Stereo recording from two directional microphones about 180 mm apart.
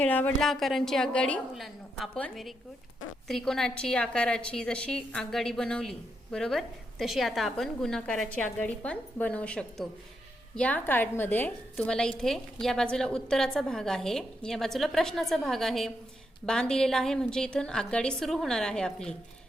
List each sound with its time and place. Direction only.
0.0 s a woman's voice: 10° left (ahead or behind)